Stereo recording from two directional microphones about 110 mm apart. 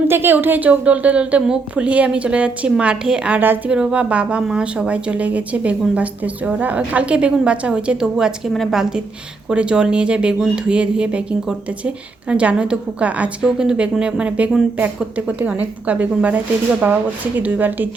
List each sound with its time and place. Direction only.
0.1 s a woman's voice: 20° right (ahead or behind)